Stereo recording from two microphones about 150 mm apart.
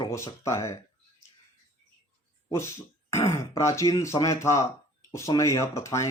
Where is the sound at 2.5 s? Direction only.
20° left (ahead or behind).